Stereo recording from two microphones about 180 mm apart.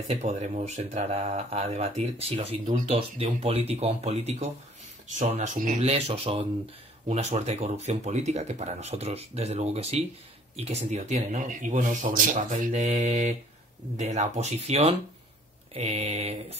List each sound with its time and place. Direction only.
0.1 s speech: 40° right (ahead or behind)